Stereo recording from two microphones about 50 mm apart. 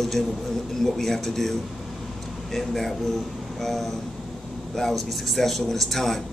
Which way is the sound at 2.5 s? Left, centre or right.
Centre.